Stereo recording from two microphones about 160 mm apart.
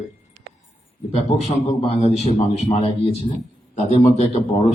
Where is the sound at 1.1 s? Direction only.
40° left (ahead or behind).